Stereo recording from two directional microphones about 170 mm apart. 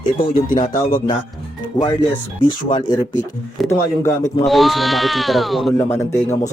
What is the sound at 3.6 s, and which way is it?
Speech, 15° left (ahead or behind).